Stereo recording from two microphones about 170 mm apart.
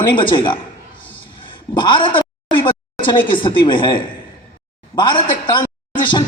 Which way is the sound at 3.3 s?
30° left (ahead or behind).